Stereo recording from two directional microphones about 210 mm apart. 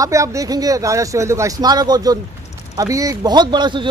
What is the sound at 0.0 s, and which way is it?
A man's voice, 15° right (ahead or behind).